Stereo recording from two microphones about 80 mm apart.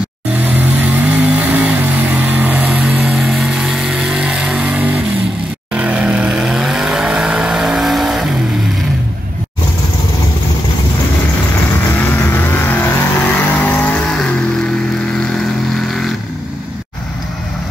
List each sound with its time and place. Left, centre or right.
0.3 s vehicle: centre
3.0 s vehicle: centre
12.6 s vehicle: centre